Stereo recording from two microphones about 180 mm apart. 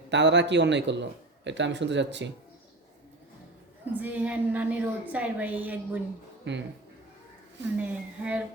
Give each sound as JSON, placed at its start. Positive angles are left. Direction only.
{"t": 0.1, "sound": "a man's voice", "side_deg": -80}
{"t": 3.9, "sound": "a woman's voice", "side_deg": -10}
{"t": 6.5, "sound": "a man's voice", "side_deg": -80}
{"t": 7.8, "sound": "a woman's voice", "side_deg": -5}